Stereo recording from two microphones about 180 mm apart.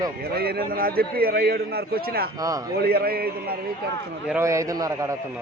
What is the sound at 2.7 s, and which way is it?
Speech, 60° right (ahead or behind).